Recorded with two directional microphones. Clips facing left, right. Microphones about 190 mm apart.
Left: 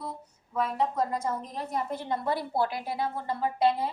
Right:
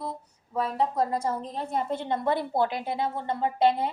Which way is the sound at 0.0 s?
30° right (ahead or behind).